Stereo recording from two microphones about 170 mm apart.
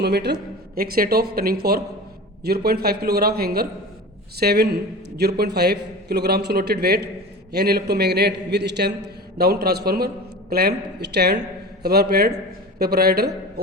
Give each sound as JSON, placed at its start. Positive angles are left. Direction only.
{"t": 0.0, "sound": "a man's voice", "side_deg": -75}
{"t": 0.8, "sound": "a man's voice", "side_deg": -60}
{"t": 9.0, "sound": "a man's voice", "side_deg": -70}